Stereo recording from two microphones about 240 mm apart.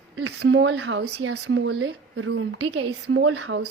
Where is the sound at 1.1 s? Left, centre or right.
Right.